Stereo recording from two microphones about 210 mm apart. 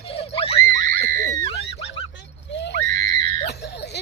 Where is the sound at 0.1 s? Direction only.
25° left (ahead or behind).